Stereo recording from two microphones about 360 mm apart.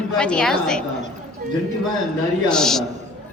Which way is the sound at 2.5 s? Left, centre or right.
Centre.